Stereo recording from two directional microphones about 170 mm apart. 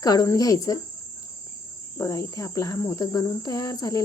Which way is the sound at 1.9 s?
15° left (ahead or behind).